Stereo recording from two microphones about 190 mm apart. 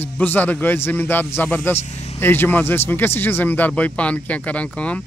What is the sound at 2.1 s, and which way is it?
Speech, 10° left (ahead or behind).